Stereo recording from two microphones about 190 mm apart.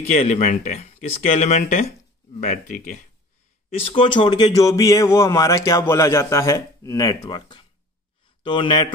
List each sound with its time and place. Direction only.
0.0 s speech: 35° left (ahead or behind)
3.7 s a man's voice: 30° left (ahead or behind)